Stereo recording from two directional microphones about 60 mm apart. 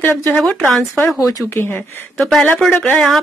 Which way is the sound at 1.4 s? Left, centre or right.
Left.